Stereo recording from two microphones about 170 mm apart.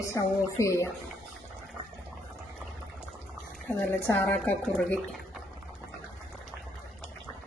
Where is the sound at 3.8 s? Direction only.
5° left (ahead or behind).